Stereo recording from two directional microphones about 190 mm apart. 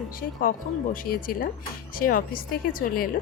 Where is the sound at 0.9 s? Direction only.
50° left (ahead or behind).